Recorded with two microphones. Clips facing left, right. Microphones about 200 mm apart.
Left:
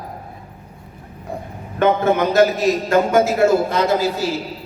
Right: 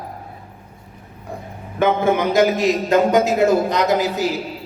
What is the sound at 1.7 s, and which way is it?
A man's voice, 15° right (ahead or behind).